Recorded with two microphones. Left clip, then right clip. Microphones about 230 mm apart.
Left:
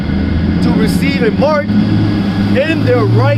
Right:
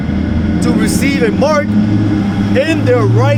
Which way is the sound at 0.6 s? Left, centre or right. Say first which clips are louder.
Right 1 dB; right.